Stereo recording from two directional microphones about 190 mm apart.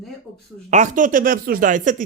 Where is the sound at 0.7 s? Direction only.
40° right (ahead or behind).